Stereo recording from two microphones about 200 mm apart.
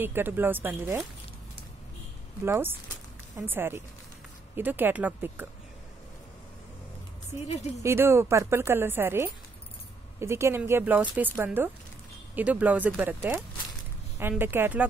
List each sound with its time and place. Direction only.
0.0 s speech: 10° right (ahead or behind)
2.4 s speech: 10° right (ahead or behind)
7.4 s a woman's voice: 35° left (ahead or behind)
7.8 s speech: 15° right (ahead or behind)